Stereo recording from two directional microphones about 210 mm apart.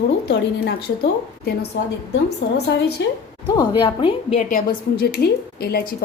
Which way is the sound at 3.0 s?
60° left (ahead or behind).